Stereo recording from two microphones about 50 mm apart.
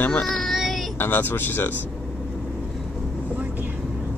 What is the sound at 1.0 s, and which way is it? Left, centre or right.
Speech, left.